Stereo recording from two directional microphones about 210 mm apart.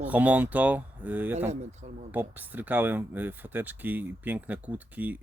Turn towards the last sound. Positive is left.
turn(degrees=-10)  # may be behind; listen again after turning